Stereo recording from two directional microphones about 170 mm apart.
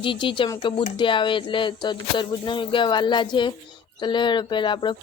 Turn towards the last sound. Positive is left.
turn(degrees=30)  # may be behind; listen again after turning